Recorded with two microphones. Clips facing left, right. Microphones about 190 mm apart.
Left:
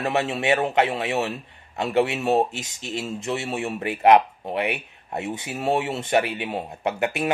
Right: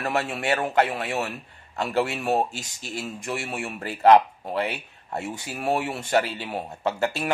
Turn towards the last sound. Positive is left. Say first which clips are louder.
# left 1 dB
turn(degrees=20)  # may be behind; listen again after turning